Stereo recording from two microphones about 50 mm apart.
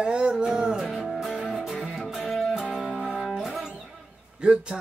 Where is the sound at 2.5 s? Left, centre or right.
Centre.